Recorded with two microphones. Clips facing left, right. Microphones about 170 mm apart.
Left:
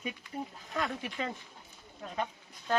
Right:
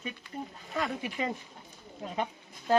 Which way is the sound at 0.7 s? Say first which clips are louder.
Right 3 dB; centre (ahead or behind).